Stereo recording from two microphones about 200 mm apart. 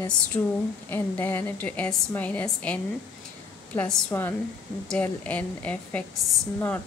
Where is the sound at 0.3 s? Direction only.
20° left (ahead or behind).